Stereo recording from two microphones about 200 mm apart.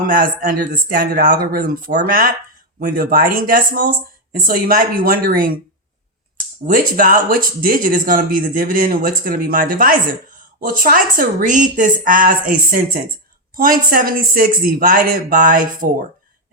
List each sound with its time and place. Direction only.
0.1 s speech: 45° right (ahead or behind)
6.7 s speech: 45° right (ahead or behind)